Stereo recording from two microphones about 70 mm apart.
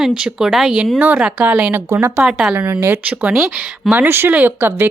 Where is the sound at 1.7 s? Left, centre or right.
Right.